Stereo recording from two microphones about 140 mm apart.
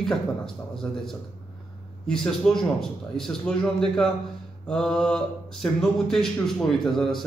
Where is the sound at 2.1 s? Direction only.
5° left (ahead or behind).